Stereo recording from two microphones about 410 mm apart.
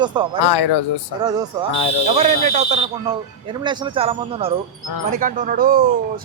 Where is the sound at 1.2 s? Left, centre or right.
Centre.